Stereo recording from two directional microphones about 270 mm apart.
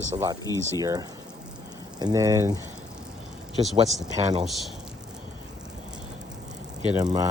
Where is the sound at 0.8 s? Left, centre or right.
Centre.